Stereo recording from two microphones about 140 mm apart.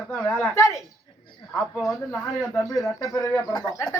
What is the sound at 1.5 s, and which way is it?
Speech, centre (ahead or behind).